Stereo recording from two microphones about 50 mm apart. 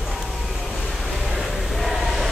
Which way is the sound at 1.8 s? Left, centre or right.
Centre.